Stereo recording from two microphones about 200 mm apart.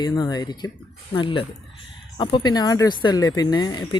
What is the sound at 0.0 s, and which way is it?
Speech, 20° left (ahead or behind).